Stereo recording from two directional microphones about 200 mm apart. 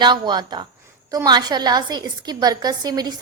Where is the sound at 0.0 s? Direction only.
20° right (ahead or behind).